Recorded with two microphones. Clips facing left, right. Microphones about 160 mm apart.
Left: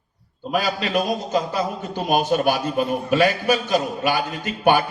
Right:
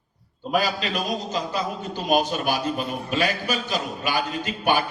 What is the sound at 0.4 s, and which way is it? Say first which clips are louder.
Speech: even; centre (ahead or behind).